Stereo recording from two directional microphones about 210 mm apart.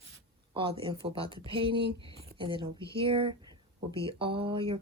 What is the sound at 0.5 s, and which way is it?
Speech, 25° right (ahead or behind).